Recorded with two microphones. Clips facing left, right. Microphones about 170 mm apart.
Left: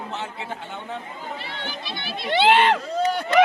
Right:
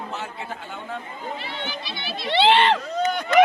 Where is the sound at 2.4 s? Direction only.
10° left (ahead or behind).